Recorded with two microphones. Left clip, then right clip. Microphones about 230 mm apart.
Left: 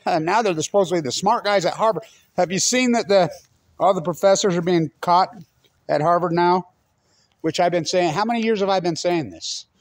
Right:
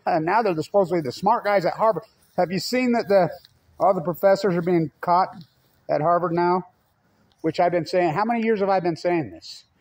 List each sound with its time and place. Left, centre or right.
0.0 s a man's voice: centre